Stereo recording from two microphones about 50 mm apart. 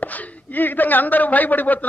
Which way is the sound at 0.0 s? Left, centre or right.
Left.